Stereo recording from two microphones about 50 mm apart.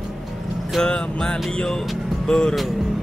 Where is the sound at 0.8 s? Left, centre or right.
Left.